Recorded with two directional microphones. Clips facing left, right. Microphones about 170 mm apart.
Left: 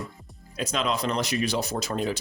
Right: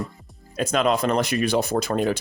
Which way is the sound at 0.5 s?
50° right (ahead or behind).